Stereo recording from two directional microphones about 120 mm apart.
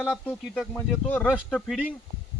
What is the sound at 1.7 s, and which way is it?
Speech, 10° right (ahead or behind).